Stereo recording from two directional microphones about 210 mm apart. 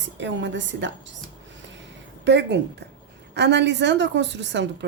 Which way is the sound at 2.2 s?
55° right (ahead or behind).